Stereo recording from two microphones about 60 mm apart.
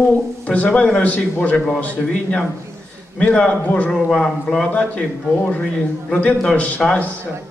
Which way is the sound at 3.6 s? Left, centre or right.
Left.